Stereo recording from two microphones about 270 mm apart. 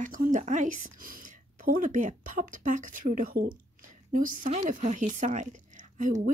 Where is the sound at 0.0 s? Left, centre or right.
Right.